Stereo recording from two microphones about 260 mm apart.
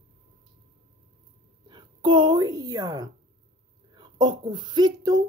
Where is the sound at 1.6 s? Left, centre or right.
Centre.